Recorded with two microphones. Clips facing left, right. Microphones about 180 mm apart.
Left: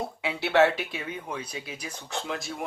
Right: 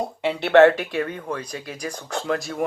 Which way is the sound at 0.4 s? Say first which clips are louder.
Right 8 dB; 60° right (ahead or behind).